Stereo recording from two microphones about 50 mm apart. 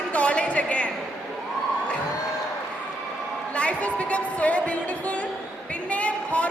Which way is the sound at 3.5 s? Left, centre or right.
Left.